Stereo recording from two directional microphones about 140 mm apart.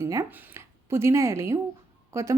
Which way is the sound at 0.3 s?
20° right (ahead or behind).